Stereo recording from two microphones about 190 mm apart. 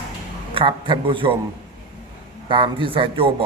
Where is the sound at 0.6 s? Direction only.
25° right (ahead or behind).